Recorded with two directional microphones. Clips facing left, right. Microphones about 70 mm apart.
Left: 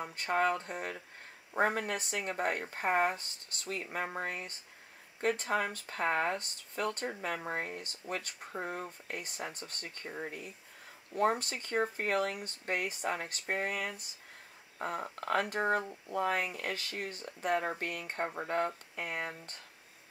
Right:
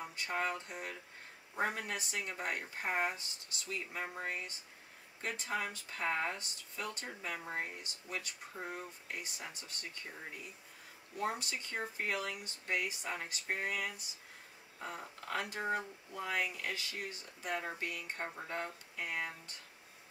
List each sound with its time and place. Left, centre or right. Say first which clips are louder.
0.0 s speech: left 7 dB; left